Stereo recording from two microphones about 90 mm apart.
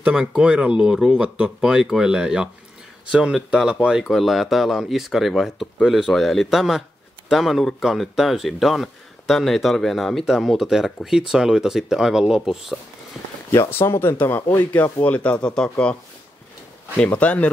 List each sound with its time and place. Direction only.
0.0 s speech: 15° right (ahead or behind)
13.5 s speech: 30° left (ahead or behind); by 15.7 s 10° left (ahead or behind)
16.9 s speech: 15° left (ahead or behind)